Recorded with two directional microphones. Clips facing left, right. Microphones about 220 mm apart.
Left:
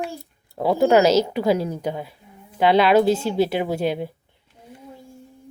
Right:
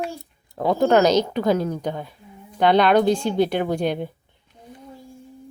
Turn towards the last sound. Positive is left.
turn(degrees=5)  # may be behind; listen again after turning